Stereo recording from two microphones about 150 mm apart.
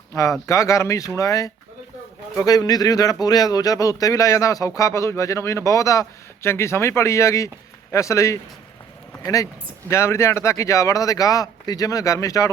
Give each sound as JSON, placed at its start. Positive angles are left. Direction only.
{"t": 0.1, "sound": "speech", "side_deg": 20}